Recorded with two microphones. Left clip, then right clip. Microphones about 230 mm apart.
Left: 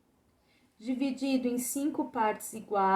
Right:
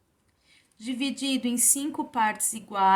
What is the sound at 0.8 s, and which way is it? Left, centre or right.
A woman's voice, right.